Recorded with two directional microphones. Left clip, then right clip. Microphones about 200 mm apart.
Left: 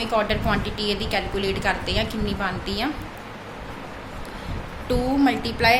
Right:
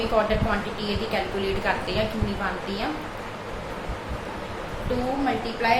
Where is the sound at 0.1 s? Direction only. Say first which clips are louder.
Left 1 dB; 50° left (ahead or behind).